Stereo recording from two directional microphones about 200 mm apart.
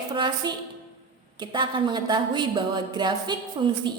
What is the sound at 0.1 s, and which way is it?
A woman's voice, 25° right (ahead or behind).